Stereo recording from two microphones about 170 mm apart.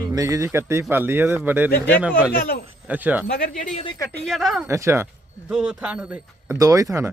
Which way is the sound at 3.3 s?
50° left (ahead or behind).